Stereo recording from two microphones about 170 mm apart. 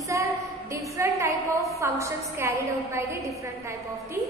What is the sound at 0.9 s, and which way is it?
A woman's voice, 20° right (ahead or behind).